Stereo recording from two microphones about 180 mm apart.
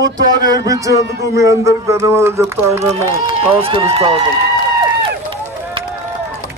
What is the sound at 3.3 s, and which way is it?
Speech, 30° right (ahead or behind).